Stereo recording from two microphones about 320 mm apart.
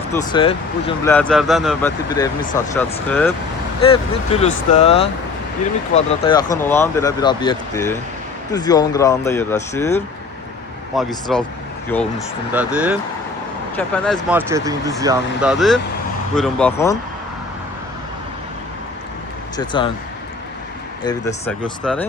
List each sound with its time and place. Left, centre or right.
0.1 s speech: centre
1.1 s speech: centre
2.0 s speech: centre
3.8 s speech: centre
12.5 s speech: centre
14.3 s speech: centre
19.5 s speech: centre
21.0 s speech: centre